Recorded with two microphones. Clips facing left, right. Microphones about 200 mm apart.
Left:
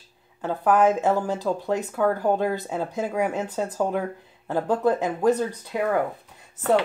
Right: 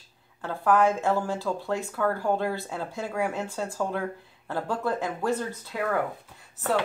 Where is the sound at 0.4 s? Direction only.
20° left (ahead or behind).